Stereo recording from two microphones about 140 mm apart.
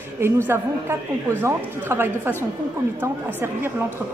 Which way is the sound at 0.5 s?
15° right (ahead or behind).